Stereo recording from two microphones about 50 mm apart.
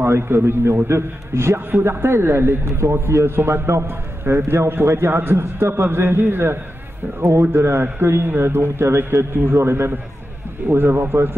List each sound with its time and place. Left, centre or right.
0.0 s a man's voice: right
1.7 s a man's voice: right